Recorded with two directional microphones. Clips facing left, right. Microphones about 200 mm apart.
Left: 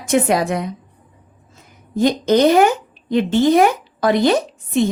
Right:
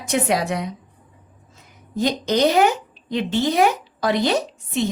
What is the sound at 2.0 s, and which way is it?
A woman's voice, 50° left (ahead or behind).